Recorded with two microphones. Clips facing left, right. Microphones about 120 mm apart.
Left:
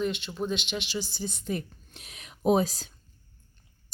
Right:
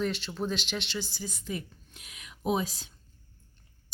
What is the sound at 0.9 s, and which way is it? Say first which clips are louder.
Speech: left 2 dB; 15° left (ahead or behind).